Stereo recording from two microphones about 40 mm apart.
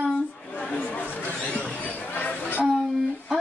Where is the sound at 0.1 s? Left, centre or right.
Left.